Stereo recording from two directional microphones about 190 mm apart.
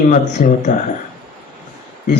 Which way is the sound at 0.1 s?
40° left (ahead or behind).